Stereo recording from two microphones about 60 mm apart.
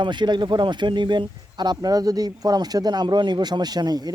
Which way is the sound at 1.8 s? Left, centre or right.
Right.